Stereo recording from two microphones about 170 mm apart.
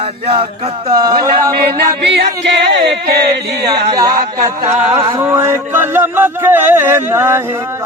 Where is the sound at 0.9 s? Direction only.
25° right (ahead or behind).